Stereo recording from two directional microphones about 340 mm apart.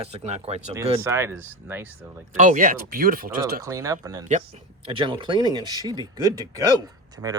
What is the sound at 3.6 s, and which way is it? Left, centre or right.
Speech, centre.